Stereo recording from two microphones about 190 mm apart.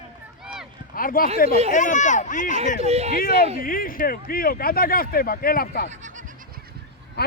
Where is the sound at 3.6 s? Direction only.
50° left (ahead or behind).